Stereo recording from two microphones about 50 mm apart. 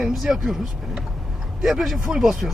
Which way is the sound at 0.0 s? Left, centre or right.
Centre.